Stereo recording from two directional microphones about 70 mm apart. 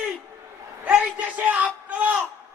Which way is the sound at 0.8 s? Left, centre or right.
Right.